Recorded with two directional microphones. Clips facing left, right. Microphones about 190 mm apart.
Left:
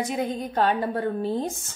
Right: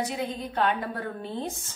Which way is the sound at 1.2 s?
40° left (ahead or behind).